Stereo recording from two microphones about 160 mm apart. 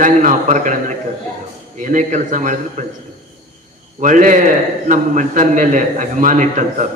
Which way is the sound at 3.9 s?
55° right (ahead or behind).